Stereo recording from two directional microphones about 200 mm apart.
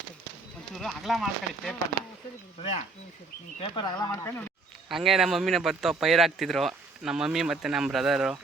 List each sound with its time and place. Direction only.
0.7 s speech: centre (ahead or behind)
3.6 s speech: 20° left (ahead or behind)
4.9 s speech: centre (ahead or behind)